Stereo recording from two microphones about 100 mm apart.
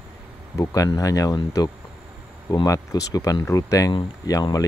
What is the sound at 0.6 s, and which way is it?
Speech, 35° left (ahead or behind).